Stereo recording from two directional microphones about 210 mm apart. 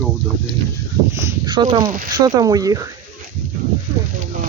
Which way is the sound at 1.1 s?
15° right (ahead or behind).